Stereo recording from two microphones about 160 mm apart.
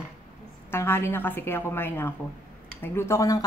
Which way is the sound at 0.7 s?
15° left (ahead or behind).